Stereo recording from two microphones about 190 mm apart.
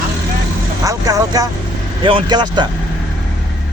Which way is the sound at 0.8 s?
20° right (ahead or behind).